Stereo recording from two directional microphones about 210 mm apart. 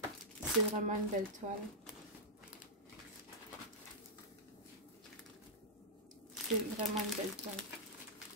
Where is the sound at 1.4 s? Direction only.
35° right (ahead or behind).